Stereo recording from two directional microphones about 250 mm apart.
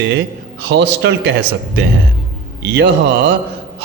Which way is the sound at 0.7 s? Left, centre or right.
Right.